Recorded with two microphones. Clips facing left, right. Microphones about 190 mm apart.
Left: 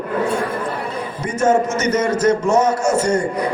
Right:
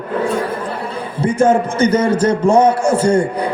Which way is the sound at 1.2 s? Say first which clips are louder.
Right 3 dB; 30° right (ahead or behind).